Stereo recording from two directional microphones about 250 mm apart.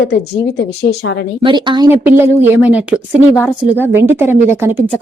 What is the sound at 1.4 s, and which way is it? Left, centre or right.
A woman's voice, centre.